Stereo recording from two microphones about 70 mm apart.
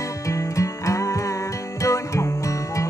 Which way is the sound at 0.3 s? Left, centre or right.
Left.